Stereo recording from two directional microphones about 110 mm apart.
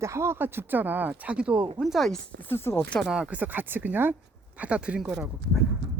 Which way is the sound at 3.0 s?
5° right (ahead or behind).